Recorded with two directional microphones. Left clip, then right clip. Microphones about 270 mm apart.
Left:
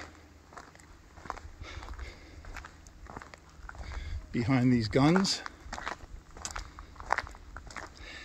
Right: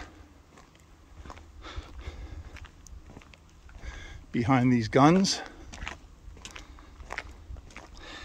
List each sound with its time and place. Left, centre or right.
1.6 s walk: centre
3.8 s a sound: centre
7.2 s walk: centre